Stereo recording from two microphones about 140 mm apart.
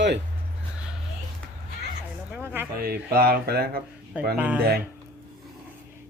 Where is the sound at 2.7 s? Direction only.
90° right.